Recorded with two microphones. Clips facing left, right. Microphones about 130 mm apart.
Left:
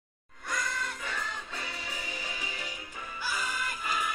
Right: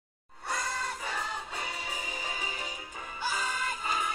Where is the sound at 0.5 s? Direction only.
30° right (ahead or behind).